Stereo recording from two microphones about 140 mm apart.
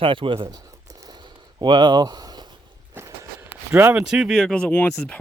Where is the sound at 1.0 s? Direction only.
30° right (ahead or behind); by 3.9 s 15° right (ahead or behind).